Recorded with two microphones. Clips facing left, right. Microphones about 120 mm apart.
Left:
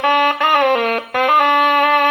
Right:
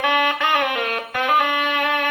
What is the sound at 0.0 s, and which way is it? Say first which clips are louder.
Saxophone: left 5 dB; 45° left (ahead or behind).